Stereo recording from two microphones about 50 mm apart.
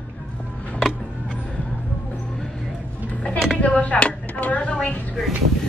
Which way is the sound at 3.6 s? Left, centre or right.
Left.